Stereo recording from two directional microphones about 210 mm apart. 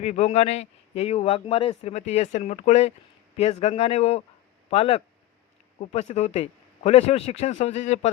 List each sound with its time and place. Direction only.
0.0 s a man's voice: 30° left (ahead or behind)